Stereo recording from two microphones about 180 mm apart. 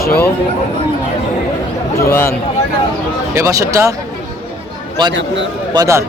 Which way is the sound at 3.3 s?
15° right (ahead or behind).